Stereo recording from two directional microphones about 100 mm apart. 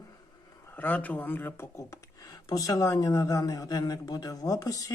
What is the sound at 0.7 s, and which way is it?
Speech, 15° left (ahead or behind).